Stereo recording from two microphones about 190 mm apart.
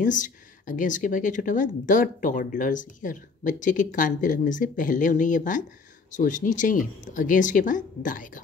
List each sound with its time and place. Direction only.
0.0 s speech: 45° left (ahead or behind)